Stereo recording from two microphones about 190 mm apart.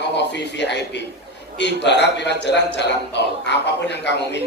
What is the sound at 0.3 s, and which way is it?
A man's voice, 65° left (ahead or behind).